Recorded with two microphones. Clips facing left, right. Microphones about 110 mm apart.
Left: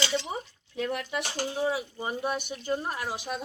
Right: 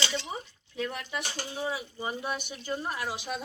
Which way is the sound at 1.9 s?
45° left (ahead or behind).